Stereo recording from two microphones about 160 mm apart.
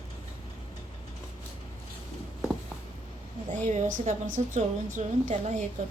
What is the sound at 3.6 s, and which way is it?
A woman's voice, 50° right (ahead or behind).